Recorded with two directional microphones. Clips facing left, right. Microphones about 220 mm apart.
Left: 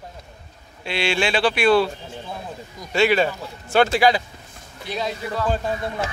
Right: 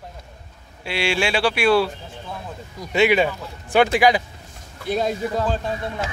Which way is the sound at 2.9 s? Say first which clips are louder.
Right 1 dB; 15° right (ahead or behind).